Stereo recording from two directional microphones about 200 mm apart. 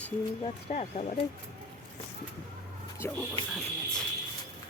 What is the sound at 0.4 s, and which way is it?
Speech, 35° left (ahead or behind).